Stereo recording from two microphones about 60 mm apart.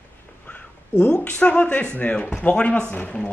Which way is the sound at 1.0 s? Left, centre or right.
Left.